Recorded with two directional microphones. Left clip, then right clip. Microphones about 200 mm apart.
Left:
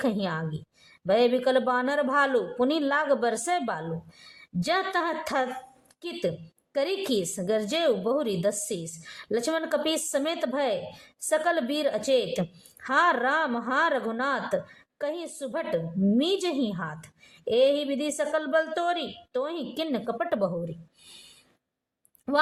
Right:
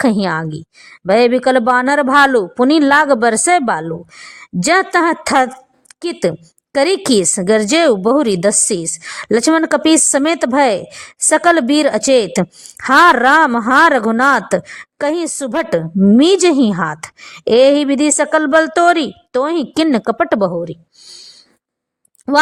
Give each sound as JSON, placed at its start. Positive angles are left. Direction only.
{"t": 0.0, "sound": "a woman's voice", "side_deg": -40}